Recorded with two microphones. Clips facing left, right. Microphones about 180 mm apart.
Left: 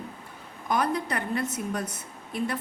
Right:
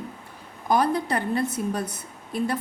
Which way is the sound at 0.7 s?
30° right (ahead or behind).